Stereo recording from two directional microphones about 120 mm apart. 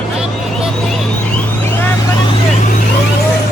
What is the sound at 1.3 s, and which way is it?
Vehicle, 15° left (ahead or behind).